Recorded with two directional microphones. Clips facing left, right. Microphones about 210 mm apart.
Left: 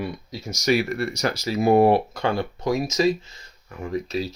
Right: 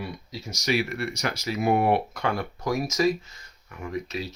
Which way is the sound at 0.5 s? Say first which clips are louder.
Left 5 dB; 45° left (ahead or behind).